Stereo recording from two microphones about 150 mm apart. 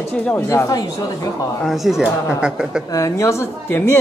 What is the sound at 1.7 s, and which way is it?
Speech, centre (ahead or behind).